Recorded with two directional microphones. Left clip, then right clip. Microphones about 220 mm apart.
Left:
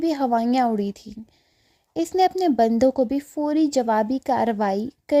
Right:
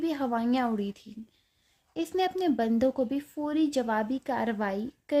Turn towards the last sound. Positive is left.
turn(degrees=35)  # may be behind; listen again after turning